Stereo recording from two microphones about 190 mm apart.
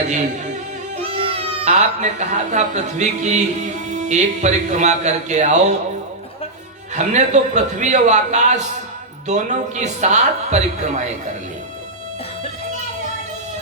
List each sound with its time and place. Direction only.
0.0 s speech: 40° right (ahead or behind)
6.9 s speech: 40° right (ahead or behind)